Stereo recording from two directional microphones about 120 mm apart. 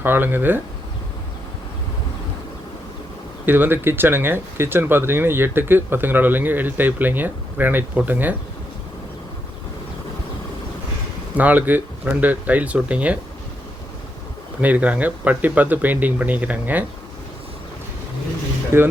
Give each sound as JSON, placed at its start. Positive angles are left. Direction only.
{"t": 0.0, "sound": "speech", "side_deg": -15}
{"t": 3.4, "sound": "speech", "side_deg": -15}
{"t": 11.3, "sound": "speech", "side_deg": -15}
{"t": 14.6, "sound": "speech", "side_deg": -10}
{"t": 18.7, "sound": "speech", "side_deg": -20}